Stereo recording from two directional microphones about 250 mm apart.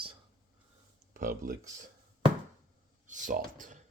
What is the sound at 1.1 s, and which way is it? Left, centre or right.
Speech, right.